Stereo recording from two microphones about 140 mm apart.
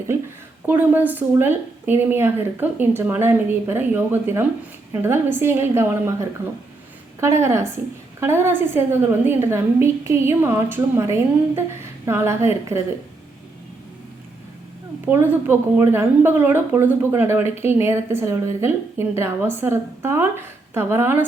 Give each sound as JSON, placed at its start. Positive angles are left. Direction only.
{"t": 0.7, "sound": "a woman's voice", "side_deg": -15}
{"t": 15.1, "sound": "a woman's voice", "side_deg": -15}